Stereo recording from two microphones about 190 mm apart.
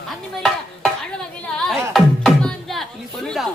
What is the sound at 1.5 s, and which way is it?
Music, 5° left (ahead or behind).